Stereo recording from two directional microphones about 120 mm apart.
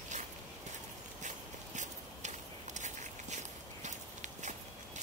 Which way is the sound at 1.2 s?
90° right.